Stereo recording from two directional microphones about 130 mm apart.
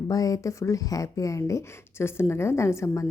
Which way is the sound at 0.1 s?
25° left (ahead or behind).